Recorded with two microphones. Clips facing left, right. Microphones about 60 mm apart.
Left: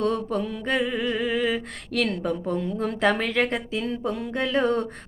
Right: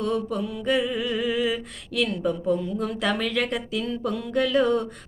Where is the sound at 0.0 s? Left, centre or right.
Left.